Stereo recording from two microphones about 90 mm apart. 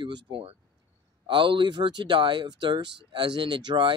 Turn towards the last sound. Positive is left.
turn(degrees=-60)  # may be behind; listen again after turning